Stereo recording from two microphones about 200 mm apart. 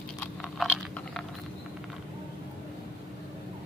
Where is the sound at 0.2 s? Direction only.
Centre (ahead or behind).